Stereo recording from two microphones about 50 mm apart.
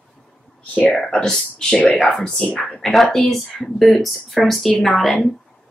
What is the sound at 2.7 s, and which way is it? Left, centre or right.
Speech, centre.